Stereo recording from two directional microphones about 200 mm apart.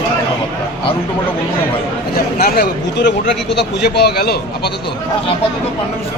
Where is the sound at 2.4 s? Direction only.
50° left (ahead or behind).